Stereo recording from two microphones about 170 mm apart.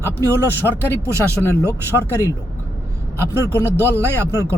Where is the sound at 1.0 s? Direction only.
15° right (ahead or behind).